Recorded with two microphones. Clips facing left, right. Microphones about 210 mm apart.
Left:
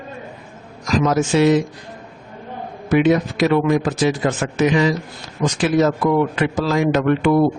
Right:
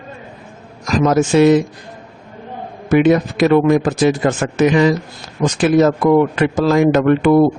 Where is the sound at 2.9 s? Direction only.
50° right (ahead or behind).